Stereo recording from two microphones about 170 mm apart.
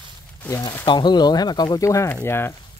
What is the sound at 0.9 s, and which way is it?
Speech, 25° left (ahead or behind).